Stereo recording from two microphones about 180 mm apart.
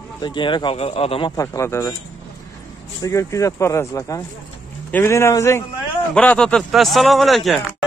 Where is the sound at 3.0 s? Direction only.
15° left (ahead or behind).